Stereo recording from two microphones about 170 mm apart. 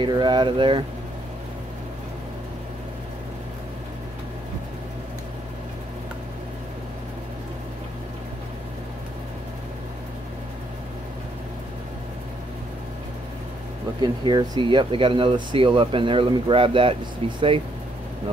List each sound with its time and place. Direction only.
0.0 s speech: 25° right (ahead or behind)
14.0 s speech: 25° right (ahead or behind)